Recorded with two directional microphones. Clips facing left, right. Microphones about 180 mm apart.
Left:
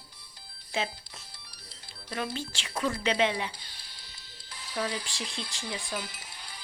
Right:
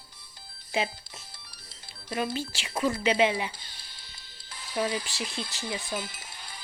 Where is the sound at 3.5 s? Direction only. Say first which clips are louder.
Right 1 dB; 50° right (ahead or behind).